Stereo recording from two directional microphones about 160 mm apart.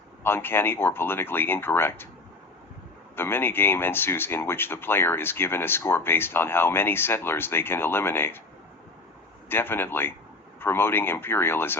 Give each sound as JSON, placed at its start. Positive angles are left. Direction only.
{"t": 0.2, "sound": "speech", "side_deg": 15}
{"t": 3.2, "sound": "speech", "side_deg": 15}
{"t": 9.5, "sound": "speech", "side_deg": 15}